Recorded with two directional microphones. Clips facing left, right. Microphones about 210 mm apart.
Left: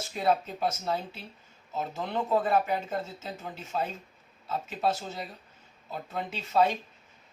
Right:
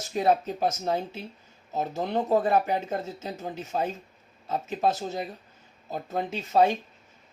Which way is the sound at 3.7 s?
40° right (ahead or behind).